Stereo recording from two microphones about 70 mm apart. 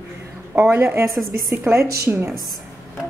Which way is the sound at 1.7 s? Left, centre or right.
Right.